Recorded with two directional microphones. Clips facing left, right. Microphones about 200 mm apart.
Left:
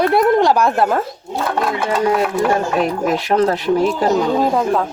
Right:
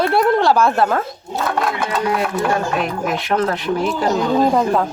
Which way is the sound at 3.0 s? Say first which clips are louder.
Left 3 dB; 35° left (ahead or behind).